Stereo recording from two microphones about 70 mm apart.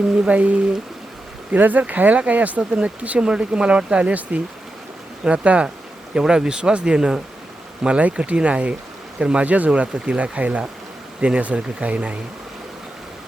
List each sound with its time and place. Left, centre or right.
0.3 s speech: centre